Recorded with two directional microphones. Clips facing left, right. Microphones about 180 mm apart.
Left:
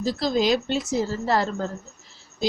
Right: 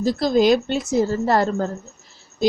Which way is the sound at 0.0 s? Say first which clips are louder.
Right 5 dB; 50° right (ahead or behind).